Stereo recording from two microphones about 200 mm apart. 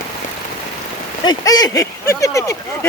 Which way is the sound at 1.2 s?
20° left (ahead or behind).